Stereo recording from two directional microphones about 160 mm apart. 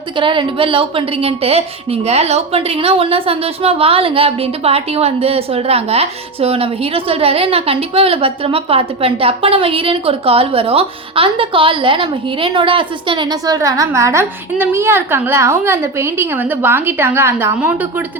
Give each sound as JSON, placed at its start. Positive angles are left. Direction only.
{"t": 0.2, "sound": "a woman's voice", "side_deg": -30}